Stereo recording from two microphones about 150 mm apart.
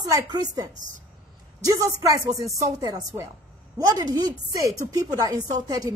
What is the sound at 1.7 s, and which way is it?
Speech, 25° right (ahead or behind).